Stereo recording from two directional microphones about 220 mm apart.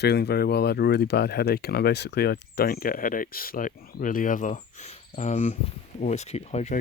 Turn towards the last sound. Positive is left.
turn(degrees=30)  # may be behind; listen again after turning